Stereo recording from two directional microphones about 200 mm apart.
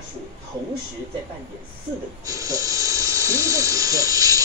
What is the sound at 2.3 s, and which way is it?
Electric toothbrush, 15° right (ahead or behind).